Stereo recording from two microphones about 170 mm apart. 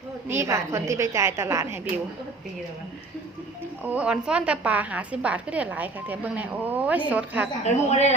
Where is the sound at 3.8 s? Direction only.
10° right (ahead or behind).